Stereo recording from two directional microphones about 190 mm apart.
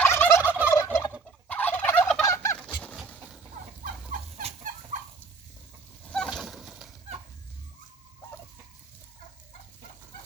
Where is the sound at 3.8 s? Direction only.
45° right (ahead or behind).